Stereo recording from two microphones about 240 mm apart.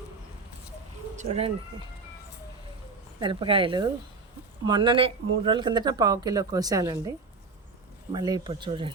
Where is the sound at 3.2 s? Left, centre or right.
Right.